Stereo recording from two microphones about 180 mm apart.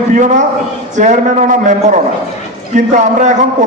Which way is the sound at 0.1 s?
45° right (ahead or behind).